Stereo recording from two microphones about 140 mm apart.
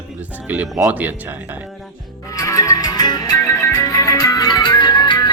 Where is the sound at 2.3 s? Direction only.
25° left (ahead or behind).